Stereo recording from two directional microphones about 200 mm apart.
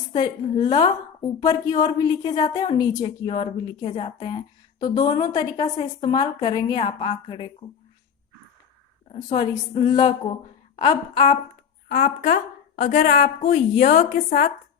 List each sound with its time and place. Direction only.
0.1 s a woman's voice: 25° left (ahead or behind)
9.1 s a woman's voice: 20° left (ahead or behind)
11.9 s a woman's voice: 50° left (ahead or behind)
12.3 s a sound: 45° left (ahead or behind)
13.0 s speech: 50° left (ahead or behind)